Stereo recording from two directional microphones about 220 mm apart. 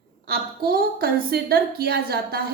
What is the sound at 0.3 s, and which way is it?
A woman's voice, 45° right (ahead or behind).